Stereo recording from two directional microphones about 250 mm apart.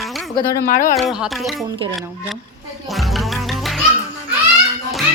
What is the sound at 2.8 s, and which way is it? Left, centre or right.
Music, centre.